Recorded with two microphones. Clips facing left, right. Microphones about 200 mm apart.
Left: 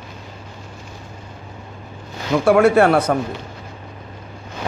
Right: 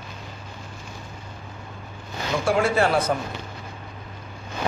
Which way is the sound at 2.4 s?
65° left (ahead or behind).